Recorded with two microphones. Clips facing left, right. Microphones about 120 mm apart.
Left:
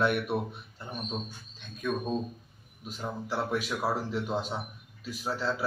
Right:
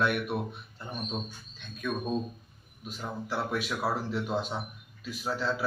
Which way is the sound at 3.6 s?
5° left (ahead or behind).